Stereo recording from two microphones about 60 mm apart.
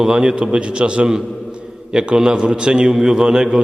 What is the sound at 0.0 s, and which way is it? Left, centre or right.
A man's voice, centre.